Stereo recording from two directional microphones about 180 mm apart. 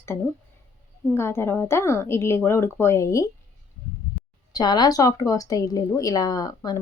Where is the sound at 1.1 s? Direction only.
15° left (ahead or behind).